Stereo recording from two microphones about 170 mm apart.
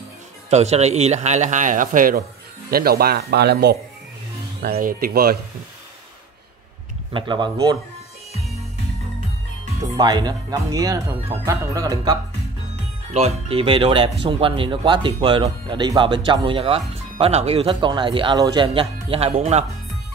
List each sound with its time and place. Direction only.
0.5 s a man's voice: 40° right (ahead or behind); by 3.7 s 75° right (ahead or behind)
4.6 s speech: 60° right (ahead or behind)
7.1 s speech: 25° right (ahead or behind)
9.9 s speech: 25° right (ahead or behind)
13.1 s speech: 35° right (ahead or behind)